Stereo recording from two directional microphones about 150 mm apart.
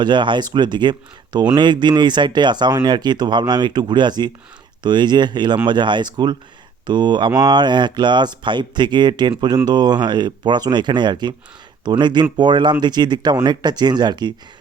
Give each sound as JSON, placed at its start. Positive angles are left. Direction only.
{"t": 0.0, "sound": "speech", "side_deg": -30}